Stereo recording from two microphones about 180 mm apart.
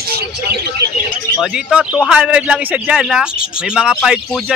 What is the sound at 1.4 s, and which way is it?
A man's voice, 5° right (ahead or behind).